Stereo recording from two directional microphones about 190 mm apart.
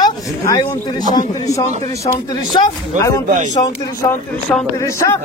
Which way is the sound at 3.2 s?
40° right (ahead or behind).